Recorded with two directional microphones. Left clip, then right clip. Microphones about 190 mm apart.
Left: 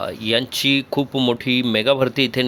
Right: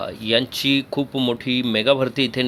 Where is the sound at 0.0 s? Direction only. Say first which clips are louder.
Even; 10° left (ahead or behind).